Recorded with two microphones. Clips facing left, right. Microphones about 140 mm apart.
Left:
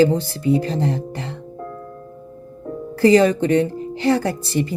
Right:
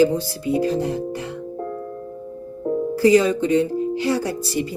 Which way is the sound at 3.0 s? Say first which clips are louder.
Left 3 dB; 60° left (ahead or behind).